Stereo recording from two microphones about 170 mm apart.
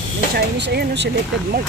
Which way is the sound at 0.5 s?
90° right.